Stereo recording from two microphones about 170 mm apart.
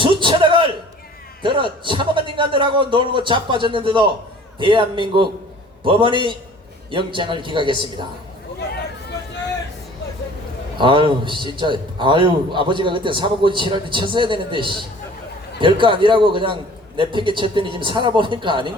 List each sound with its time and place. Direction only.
0.0 s a sound: 30° right (ahead or behind)
1.4 s a man's voice: 30° right (ahead or behind)
10.8 s a man's voice: 30° right (ahead or behind)